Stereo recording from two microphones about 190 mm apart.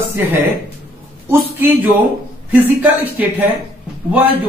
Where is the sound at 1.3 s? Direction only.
10° right (ahead or behind).